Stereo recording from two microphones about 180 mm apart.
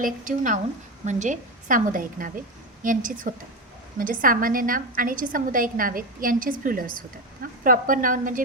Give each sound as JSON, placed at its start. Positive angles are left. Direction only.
{"t": 0.0, "sound": "a woman's voice", "side_deg": -45}